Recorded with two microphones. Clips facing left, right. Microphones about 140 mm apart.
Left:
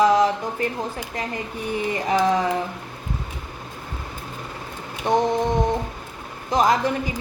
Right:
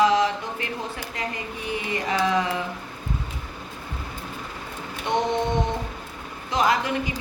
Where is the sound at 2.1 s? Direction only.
45° left (ahead or behind).